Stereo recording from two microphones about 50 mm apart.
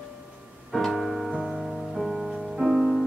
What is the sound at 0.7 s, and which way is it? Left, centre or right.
Music, centre.